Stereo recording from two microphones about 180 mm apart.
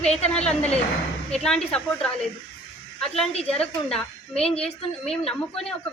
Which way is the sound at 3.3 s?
35° left (ahead or behind).